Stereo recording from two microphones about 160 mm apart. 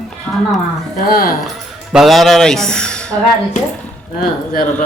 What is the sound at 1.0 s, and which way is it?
Speech, 65° left (ahead or behind).